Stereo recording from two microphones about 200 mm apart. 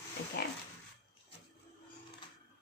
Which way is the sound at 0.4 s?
50° left (ahead or behind).